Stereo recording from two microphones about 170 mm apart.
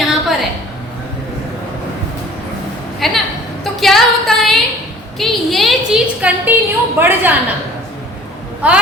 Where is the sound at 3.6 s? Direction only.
Centre (ahead or behind).